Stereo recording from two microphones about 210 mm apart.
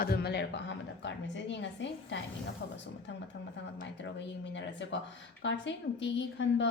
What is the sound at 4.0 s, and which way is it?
A woman's voice, 60° left (ahead or behind).